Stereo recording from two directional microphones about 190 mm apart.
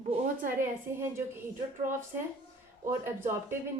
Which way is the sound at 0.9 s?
15° right (ahead or behind).